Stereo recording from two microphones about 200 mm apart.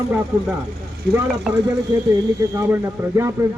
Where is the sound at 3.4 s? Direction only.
15° right (ahead or behind).